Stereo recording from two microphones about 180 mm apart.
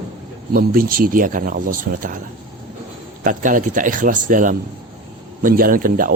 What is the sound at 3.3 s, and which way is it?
Speech, 45° right (ahead or behind).